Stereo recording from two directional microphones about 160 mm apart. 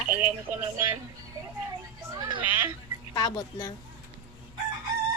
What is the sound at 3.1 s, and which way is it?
Speech, 25° left (ahead or behind).